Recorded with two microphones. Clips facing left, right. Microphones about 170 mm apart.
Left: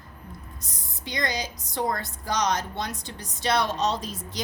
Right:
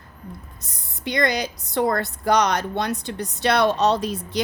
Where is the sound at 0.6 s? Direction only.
65° right (ahead or behind).